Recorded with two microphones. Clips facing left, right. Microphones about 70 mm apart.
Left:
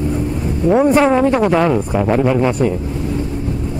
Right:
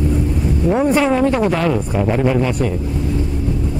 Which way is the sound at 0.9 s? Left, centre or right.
Left.